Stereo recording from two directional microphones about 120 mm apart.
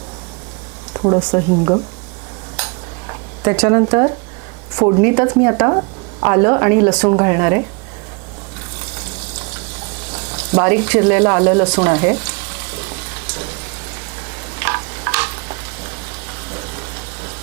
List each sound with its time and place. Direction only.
0.9 s a woman's voice: 30° right (ahead or behind)
3.1 s a woman's voice: 25° right (ahead or behind)
10.1 s frying: 25° right (ahead or behind)